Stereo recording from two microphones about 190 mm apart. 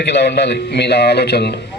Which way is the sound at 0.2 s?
60° left (ahead or behind).